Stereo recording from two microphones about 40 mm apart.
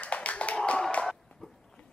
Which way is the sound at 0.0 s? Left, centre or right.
Left.